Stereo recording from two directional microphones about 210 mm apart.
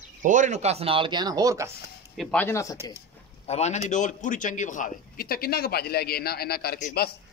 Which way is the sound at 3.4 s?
30° left (ahead or behind).